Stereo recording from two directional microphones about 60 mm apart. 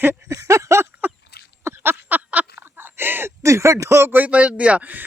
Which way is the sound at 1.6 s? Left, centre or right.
Right.